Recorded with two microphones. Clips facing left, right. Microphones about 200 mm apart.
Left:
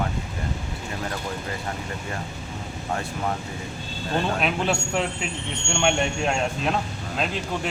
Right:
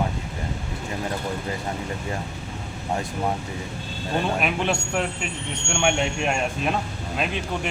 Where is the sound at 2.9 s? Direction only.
15° right (ahead or behind).